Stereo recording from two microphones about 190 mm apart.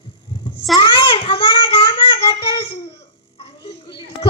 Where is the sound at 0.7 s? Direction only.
30° left (ahead or behind).